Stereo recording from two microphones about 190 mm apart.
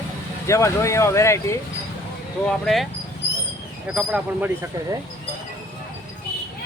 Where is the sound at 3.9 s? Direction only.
5° right (ahead or behind).